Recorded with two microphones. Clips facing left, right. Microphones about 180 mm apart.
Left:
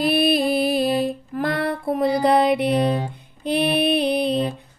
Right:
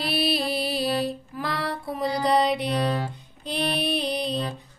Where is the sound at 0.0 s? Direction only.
50° left (ahead or behind).